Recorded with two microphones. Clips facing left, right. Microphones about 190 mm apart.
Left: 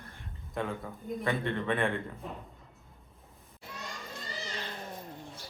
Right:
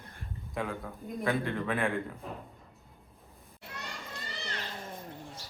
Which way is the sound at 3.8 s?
65° right (ahead or behind).